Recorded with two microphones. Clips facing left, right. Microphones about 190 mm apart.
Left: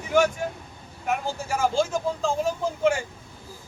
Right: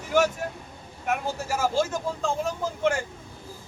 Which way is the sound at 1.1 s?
5° right (ahead or behind).